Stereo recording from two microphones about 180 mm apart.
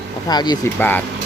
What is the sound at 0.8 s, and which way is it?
Speech, 10° left (ahead or behind).